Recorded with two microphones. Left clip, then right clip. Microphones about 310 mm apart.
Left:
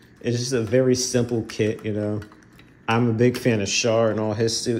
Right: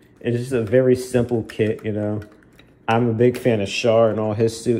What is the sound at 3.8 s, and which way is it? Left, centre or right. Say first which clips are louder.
Speech: right 5 dB; right.